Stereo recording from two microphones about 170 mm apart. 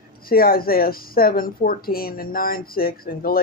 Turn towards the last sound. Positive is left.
turn(degrees=60)  # may be behind; listen again after turning